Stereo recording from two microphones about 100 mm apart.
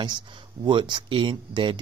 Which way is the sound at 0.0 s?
50° right (ahead or behind).